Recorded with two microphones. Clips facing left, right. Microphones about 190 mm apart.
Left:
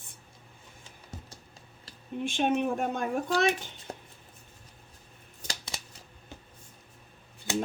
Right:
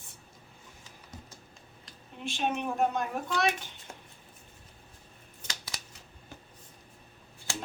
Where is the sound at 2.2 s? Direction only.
50° left (ahead or behind).